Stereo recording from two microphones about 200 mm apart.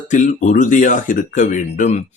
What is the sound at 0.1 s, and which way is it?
Speech, 40° left (ahead or behind).